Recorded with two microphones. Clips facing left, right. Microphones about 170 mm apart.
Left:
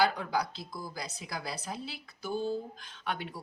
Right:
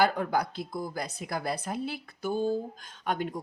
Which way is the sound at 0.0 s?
50° right (ahead or behind).